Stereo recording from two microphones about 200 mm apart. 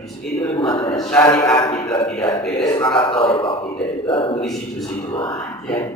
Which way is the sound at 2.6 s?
20° left (ahead or behind).